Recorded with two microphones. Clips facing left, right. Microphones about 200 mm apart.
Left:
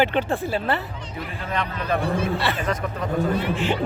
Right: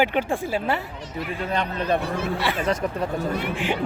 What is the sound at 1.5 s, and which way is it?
Speech, 35° right (ahead or behind).